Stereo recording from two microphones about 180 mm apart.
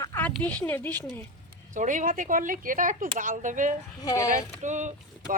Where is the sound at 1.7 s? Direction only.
45° right (ahead or behind).